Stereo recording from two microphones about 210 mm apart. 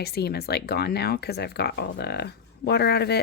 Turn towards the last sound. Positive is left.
turn(degrees=50)  # may be behind; listen again after turning